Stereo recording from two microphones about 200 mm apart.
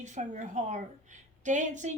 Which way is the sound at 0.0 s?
35° right (ahead or behind).